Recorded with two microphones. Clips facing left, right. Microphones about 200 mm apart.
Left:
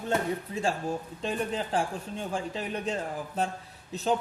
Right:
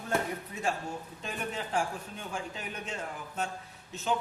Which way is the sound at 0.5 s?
25° left (ahead or behind).